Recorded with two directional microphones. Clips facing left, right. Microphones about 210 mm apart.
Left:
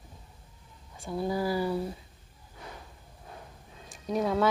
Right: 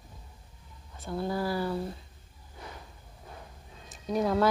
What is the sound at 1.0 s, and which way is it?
Speech, 10° left (ahead or behind).